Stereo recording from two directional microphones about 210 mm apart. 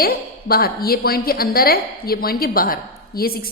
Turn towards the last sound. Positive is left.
turn(degrees=45)  # may be behind; listen again after turning